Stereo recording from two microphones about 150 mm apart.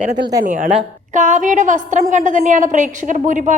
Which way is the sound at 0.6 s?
50° right (ahead or behind).